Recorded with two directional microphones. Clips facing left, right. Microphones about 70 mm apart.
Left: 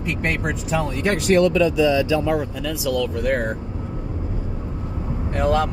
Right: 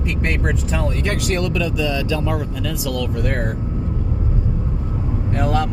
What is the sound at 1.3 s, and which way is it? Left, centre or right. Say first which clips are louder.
Speech: left 9 dB; left.